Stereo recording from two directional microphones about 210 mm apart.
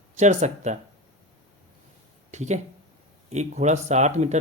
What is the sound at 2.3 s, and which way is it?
Speech, 35° right (ahead or behind).